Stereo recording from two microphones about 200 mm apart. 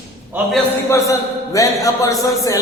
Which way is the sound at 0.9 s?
15° left (ahead or behind).